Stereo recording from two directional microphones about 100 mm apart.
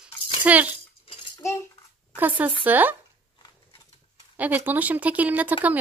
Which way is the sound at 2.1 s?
15° right (ahead or behind).